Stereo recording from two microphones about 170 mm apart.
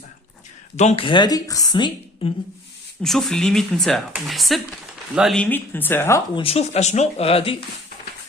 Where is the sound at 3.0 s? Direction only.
Centre (ahead or behind).